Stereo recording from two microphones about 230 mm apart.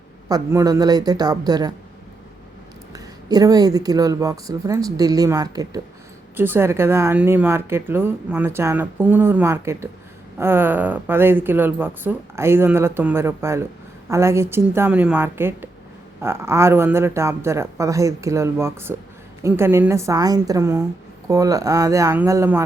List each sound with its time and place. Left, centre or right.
0.3 s speech: centre
2.9 s speech: centre